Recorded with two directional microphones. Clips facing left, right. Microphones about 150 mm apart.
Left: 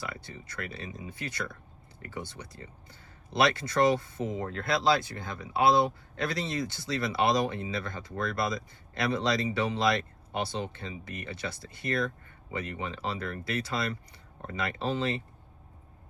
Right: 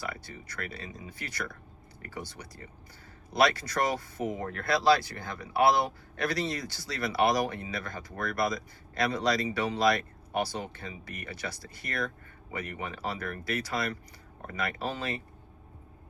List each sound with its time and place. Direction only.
0.0 s speech: 20° left (ahead or behind)